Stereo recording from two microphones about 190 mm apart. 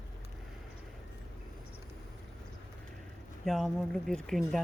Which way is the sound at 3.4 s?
Centre (ahead or behind).